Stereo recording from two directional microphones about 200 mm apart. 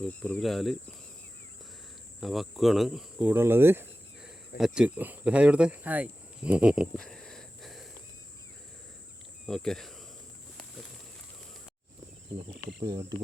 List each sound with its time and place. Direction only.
0.0 s speech: 5° left (ahead or behind)
2.2 s speech: centre (ahead or behind)
9.5 s speech: centre (ahead or behind)
12.5 s speech: 20° right (ahead or behind)